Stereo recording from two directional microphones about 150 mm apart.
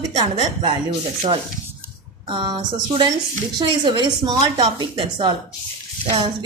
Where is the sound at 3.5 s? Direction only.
30° right (ahead or behind).